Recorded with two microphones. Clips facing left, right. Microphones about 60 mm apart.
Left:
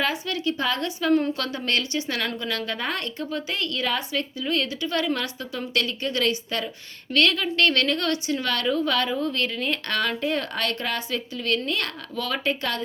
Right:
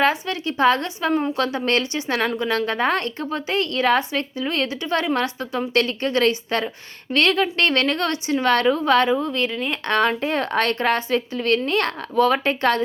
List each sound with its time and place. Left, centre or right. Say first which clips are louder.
0.0 s a woman's voice: right 5 dB; right
9.2 s speech: right 2 dB; centre
9.9 s a woman's voice: right 7 dB; right